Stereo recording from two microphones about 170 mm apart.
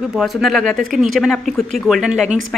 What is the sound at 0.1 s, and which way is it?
Speech, centre (ahead or behind).